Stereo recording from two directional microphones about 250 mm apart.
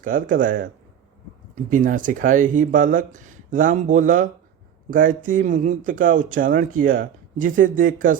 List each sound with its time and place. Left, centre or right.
0.0 s speech: right